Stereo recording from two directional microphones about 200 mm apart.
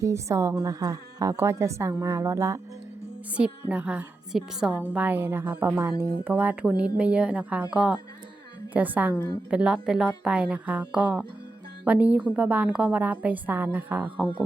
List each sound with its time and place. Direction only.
0.0 s a woman's voice: 15° right (ahead or behind)
3.3 s a woman's voice: 5° right (ahead or behind)
9.1 s a woman's voice: 20° left (ahead or behind)
9.5 s a woman's voice: 5° right (ahead or behind)